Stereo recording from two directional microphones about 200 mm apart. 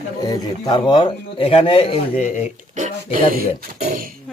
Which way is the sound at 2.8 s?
45° right (ahead or behind).